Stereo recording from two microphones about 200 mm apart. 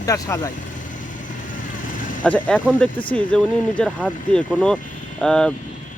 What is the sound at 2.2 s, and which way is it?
Speech, 5° left (ahead or behind).